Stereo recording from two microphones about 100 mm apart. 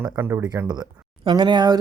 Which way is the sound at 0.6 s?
45° right (ahead or behind).